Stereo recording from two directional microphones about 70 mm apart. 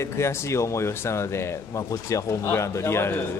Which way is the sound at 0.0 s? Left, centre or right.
Left.